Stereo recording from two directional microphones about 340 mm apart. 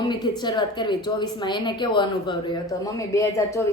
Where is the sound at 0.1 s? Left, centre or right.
Centre.